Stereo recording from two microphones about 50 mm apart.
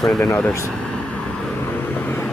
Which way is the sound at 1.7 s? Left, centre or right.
Left.